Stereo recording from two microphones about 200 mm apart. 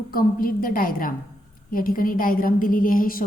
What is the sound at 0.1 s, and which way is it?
A woman's voice, 45° left (ahead or behind).